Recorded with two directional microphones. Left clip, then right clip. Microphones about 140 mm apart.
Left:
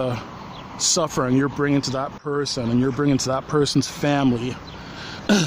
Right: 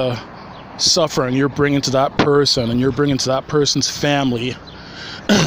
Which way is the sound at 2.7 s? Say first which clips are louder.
Right 4 dB; 15° right (ahead or behind).